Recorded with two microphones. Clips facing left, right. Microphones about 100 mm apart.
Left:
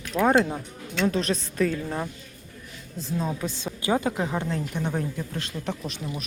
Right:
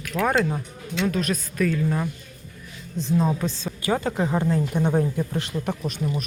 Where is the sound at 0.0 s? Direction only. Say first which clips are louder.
Left 1 dB; 25° left (ahead or behind).